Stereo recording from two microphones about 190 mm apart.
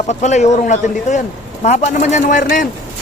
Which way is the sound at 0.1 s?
40° left (ahead or behind).